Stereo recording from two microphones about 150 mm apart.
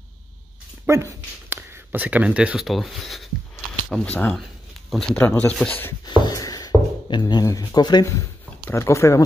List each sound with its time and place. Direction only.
0.8 s speech: 15° right (ahead or behind); by 5.7 s 10° left (ahead or behind)
6.0 s speech: 30° left (ahead or behind)